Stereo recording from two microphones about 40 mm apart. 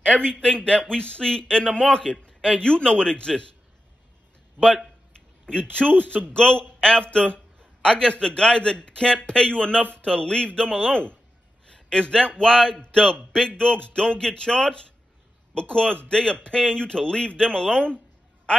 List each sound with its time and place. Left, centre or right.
0.0 s a man's voice: left
5.5 s a man's voice: left